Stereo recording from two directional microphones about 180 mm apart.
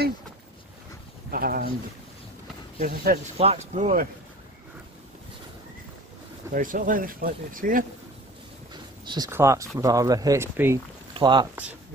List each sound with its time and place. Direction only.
1.3 s speech: 55° right (ahead or behind)
2.8 s speech: 55° right (ahead or behind)
3.3 s speech: 35° right (ahead or behind)
6.5 s speech: 50° right (ahead or behind)
9.0 s speech: 25° right (ahead or behind)
11.1 s speech: 25° right (ahead or behind)